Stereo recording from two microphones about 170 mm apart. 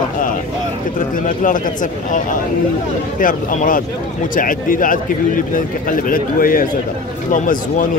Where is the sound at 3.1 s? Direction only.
55° left (ahead or behind).